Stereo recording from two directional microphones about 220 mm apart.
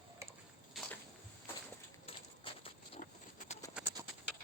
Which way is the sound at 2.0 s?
25° left (ahead or behind).